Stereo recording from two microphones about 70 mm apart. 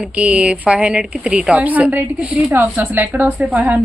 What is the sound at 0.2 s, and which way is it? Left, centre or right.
A woman's voice, centre.